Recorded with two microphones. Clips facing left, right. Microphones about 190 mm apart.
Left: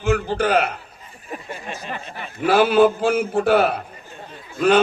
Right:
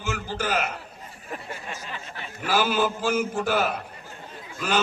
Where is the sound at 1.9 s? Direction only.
55° left (ahead or behind).